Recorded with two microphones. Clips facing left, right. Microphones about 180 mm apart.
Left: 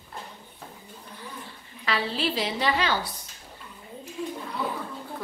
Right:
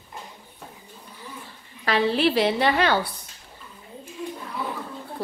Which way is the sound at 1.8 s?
55° right (ahead or behind).